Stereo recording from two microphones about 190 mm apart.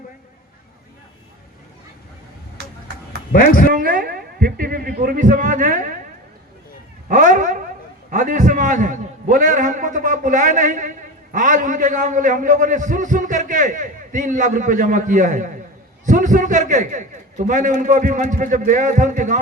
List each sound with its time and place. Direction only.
3.3 s a man's voice: 45° left (ahead or behind)
3.7 s a man's voice: 50° right (ahead or behind)
7.1 s cat: 40° right (ahead or behind)
8.1 s a man's voice: 40° right (ahead or behind)